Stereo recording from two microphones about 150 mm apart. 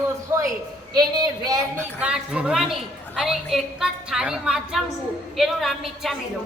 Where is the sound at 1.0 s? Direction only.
25° right (ahead or behind).